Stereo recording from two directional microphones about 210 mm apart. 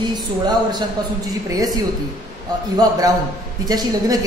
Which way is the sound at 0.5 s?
20° right (ahead or behind).